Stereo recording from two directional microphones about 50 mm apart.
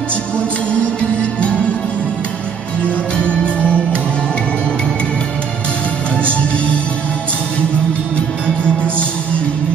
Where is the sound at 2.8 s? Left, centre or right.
Left.